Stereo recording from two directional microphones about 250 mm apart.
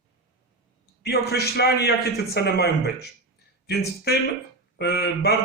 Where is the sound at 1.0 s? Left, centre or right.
Left.